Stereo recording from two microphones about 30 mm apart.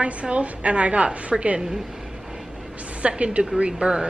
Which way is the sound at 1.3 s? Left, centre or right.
Centre.